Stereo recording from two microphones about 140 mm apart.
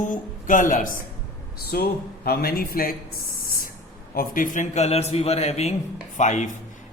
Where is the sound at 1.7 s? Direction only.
90° left.